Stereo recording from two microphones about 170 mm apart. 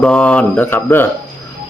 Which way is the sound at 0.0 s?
5° left (ahead or behind).